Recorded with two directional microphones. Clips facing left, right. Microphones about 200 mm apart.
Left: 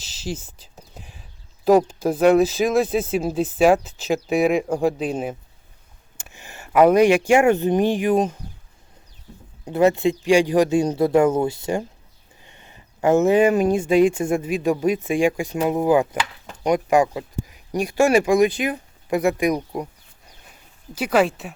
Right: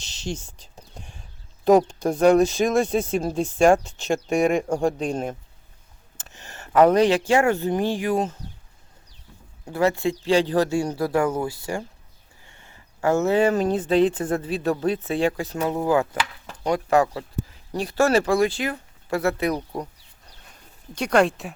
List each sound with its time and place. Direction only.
0.0 s speech: 5° left (ahead or behind)
9.6 s speech: 20° left (ahead or behind); by 21.5 s centre (ahead or behind)